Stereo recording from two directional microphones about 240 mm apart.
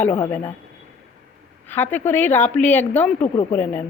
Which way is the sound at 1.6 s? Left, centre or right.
Centre.